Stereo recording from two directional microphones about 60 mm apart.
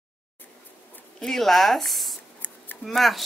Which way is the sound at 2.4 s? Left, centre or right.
Left.